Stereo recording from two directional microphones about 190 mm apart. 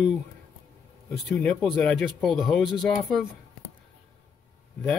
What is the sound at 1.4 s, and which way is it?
Speech, 5° left (ahead or behind).